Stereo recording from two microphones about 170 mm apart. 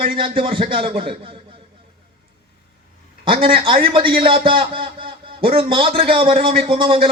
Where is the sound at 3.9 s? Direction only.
30° right (ahead or behind).